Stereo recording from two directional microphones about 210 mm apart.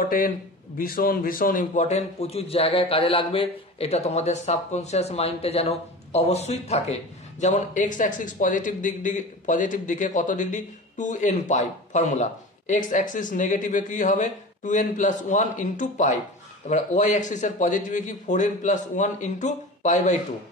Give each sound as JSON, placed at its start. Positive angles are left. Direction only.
{"t": 0.7, "sound": "a man's voice", "side_deg": 45}